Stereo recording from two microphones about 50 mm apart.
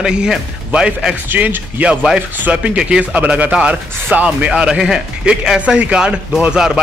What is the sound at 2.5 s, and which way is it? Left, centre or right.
Speech, right.